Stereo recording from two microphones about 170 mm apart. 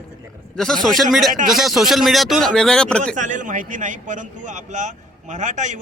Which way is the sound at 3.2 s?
50° right (ahead or behind).